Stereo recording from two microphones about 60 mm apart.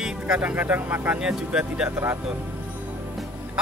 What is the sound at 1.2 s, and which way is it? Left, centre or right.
Speech, centre.